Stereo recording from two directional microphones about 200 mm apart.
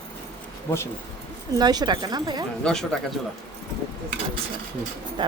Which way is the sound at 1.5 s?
20° right (ahead or behind).